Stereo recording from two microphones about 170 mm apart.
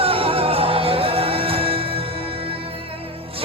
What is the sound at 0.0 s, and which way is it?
Music, 35° right (ahead or behind).